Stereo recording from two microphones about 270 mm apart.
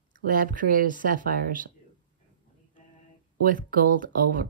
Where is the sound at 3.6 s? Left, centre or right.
Right.